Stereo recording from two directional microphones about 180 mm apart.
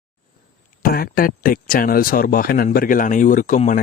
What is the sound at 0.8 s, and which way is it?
Speech, 55° left (ahead or behind).